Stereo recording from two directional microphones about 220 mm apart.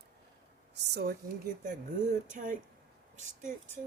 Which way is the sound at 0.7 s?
50° right (ahead or behind).